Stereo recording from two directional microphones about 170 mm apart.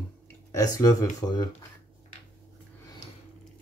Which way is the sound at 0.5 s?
20° left (ahead or behind).